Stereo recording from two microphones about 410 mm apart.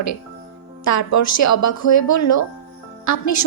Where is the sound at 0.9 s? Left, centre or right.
Left.